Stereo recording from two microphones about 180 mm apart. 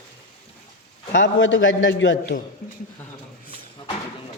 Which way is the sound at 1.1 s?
85° left.